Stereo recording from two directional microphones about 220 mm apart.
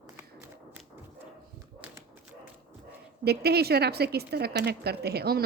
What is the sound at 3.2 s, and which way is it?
A woman's voice, 45° right (ahead or behind).